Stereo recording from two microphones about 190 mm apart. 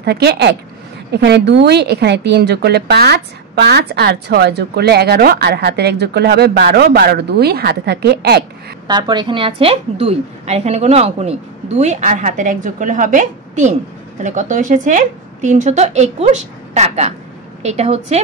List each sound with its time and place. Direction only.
0.0 s speech: 55° right (ahead or behind)
8.8 s a woman's voice: 25° right (ahead or behind)